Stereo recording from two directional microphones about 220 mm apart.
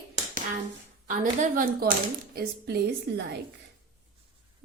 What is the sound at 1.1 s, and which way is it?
A woman's voice, 35° right (ahead or behind).